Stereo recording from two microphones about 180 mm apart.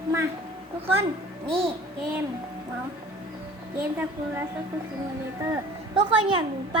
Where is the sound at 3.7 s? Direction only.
10° right (ahead or behind).